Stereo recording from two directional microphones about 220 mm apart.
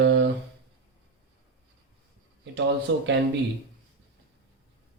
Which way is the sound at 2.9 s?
55° right (ahead or behind).